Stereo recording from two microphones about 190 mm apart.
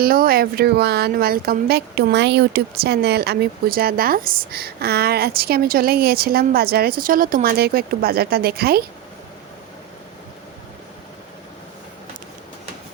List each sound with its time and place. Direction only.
0.0 s speech: 50° right (ahead or behind)